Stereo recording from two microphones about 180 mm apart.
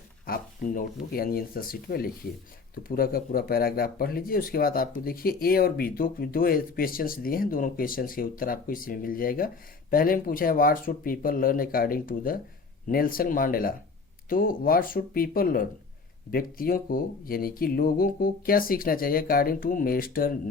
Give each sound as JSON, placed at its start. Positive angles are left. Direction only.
{"t": 0.3, "sound": "speech", "side_deg": 50}